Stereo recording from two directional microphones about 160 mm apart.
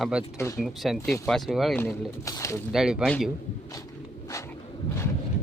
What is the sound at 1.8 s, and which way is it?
Speech, 15° left (ahead or behind).